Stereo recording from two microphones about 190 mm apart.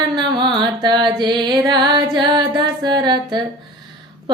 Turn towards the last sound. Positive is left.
turn(degrees=-25)  # may be behind; listen again after turning